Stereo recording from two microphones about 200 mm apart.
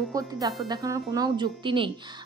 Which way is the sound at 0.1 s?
20° right (ahead or behind).